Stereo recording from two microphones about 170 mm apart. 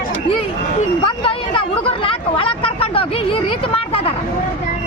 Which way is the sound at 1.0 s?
30° left (ahead or behind).